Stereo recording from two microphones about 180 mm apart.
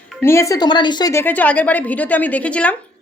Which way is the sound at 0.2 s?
15° left (ahead or behind).